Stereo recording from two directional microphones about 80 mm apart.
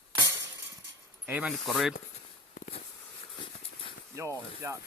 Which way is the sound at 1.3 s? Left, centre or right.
Centre.